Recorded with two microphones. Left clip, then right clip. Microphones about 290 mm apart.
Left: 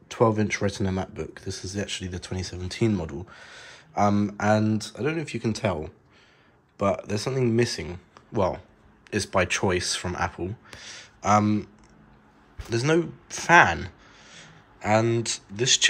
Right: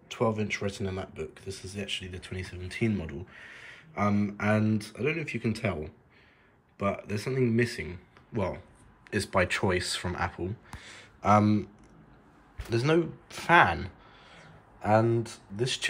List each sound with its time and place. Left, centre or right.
0.1 s speech: left; by 15.9 s centre